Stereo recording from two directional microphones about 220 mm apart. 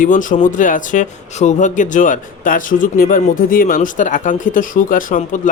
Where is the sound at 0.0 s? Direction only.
35° left (ahead or behind).